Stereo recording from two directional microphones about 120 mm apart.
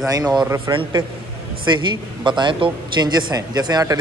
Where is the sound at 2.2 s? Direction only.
40° right (ahead or behind).